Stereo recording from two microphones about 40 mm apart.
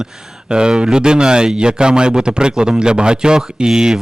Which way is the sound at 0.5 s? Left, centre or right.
Right.